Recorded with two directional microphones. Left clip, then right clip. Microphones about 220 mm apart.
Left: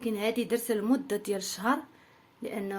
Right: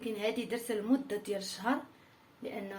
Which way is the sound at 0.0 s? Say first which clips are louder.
Left 4 dB; 60° left (ahead or behind).